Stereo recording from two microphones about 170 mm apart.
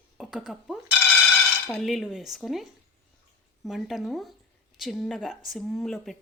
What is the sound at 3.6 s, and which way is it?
Speech, centre (ahead or behind).